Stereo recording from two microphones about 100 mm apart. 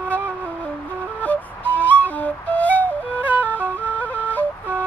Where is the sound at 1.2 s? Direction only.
15° left (ahead or behind).